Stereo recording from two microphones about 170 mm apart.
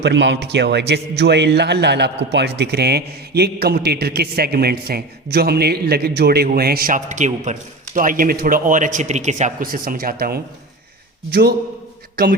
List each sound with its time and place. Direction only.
0.0 s a man's voice: 90° right; by 11.5 s 70° right (ahead or behind)